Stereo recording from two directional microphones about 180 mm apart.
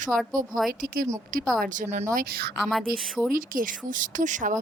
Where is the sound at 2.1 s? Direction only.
55° right (ahead or behind).